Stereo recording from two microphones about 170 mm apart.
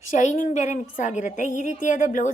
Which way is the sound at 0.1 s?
50° left (ahead or behind).